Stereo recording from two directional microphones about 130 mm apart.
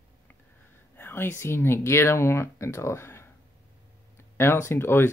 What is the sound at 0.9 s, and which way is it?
Speech, 15° left (ahead or behind).